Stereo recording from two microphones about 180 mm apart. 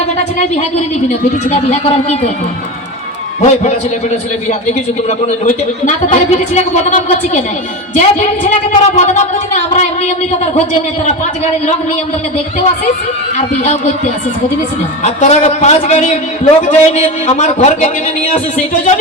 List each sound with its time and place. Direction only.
0.3 s a man's voice: 40° left (ahead or behind)
3.4 s a man's voice: 40° left (ahead or behind)
5.0 s a man's voice: 40° left (ahead or behind)
13.3 s a man's voice: 40° left (ahead or behind)